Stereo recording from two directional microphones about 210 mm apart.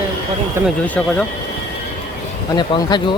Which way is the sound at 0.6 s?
5° left (ahead or behind).